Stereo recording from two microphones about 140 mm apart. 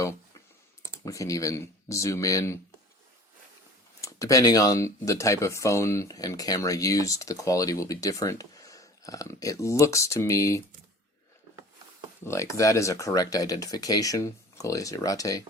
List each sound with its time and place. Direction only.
1.0 s speech: 25° left (ahead or behind)
4.0 s speech: 25° left (ahead or behind)
12.2 s speech: 20° left (ahead or behind)